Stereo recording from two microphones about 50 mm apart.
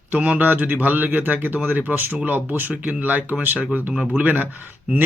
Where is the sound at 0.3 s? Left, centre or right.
Right.